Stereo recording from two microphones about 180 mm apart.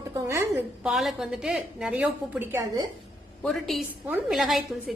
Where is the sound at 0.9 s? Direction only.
Centre (ahead or behind).